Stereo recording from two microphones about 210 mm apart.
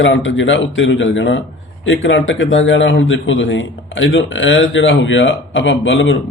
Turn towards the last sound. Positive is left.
turn(degrees=65)  # may be behind; listen again after turning